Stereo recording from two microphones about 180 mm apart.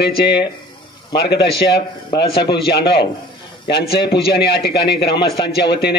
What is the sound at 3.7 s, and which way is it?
A man's voice, 65° left (ahead or behind).